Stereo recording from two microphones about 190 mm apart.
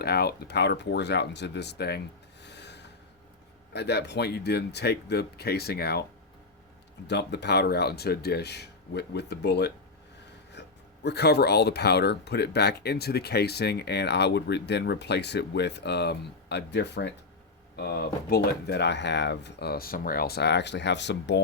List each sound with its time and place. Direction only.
0.0 s speech: 55° left (ahead or behind)
2.4 s rub: 65° left (ahead or behind)
3.7 s speech: 60° left (ahead or behind)
7.1 s speech: 65° left (ahead or behind)